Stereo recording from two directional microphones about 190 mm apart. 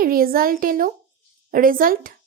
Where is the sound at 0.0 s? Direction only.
50° right (ahead or behind).